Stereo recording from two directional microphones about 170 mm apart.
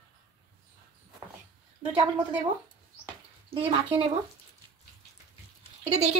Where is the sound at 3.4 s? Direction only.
35° right (ahead or behind).